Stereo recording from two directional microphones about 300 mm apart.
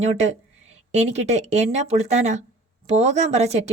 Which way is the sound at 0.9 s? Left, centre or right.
Right.